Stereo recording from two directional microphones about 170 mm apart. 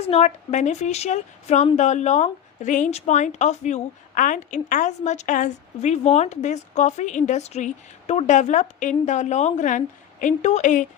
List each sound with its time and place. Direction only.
0.0 s a woman's voice: 40° left (ahead or behind)